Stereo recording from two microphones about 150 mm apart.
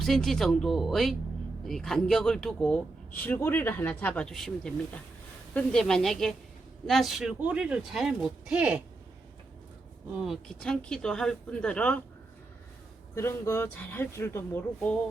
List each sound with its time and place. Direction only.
0.0 s speech: centre (ahead or behind)
10.2 s speech: centre (ahead or behind)
13.1 s speech: 20° left (ahead or behind)